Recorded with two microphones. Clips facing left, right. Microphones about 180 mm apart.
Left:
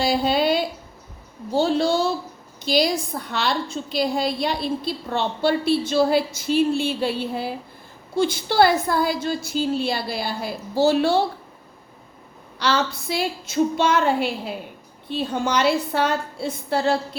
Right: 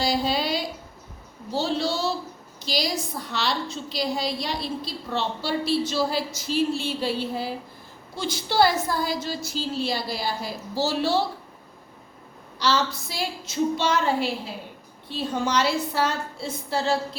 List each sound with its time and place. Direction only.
0.0 s a sound: 55° left (ahead or behind)
1.5 s a woman's voice: 50° left (ahead or behind)
12.5 s a woman's voice: 60° left (ahead or behind)